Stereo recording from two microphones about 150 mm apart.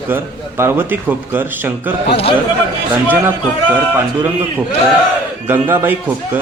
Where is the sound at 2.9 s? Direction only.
10° right (ahead or behind).